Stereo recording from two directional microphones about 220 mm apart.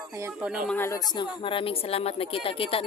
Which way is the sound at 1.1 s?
20° left (ahead or behind).